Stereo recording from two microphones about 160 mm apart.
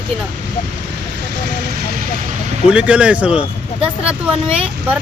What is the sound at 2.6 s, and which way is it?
Speech, 5° right (ahead or behind).